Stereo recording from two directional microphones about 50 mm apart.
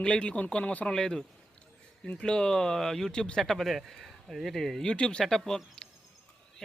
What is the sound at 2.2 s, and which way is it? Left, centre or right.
Speech, centre.